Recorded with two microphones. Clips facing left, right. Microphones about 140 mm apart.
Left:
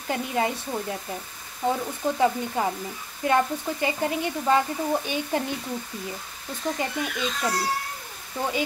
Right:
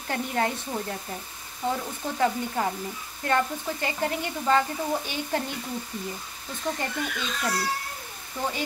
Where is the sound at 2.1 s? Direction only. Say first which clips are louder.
Left 1 dB; 15° left (ahead or behind).